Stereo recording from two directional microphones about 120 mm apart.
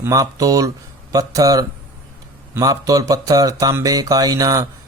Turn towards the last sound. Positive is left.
turn(degrees=-30)  # may be behind; listen again after turning